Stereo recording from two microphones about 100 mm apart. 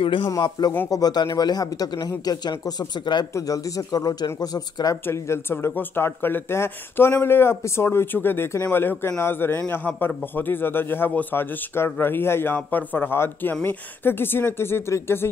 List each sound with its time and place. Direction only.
0.0 s speech: 60° left (ahead or behind)
0.3 s speech: 40° left (ahead or behind)
3.3 s speech: 35° left (ahead or behind)
5.0 s a man's voice: 25° left (ahead or behind)